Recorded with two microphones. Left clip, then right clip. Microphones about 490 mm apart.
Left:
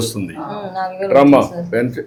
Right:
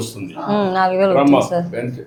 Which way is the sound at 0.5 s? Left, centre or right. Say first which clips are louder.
Right 9 dB; right.